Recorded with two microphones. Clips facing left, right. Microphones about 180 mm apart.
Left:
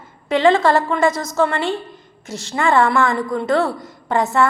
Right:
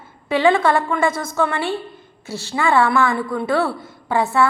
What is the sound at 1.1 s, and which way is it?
Speech, 55° right (ahead or behind).